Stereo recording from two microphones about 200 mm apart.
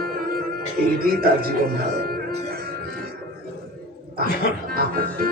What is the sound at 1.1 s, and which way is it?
Speech, 45° right (ahead or behind).